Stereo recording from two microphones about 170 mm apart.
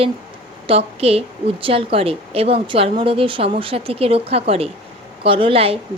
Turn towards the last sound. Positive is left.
turn(degrees=-35)  # may be behind; listen again after turning